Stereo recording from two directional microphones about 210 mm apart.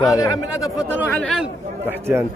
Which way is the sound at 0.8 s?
5° right (ahead or behind).